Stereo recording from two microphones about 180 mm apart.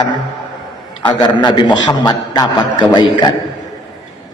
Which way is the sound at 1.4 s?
25° left (ahead or behind).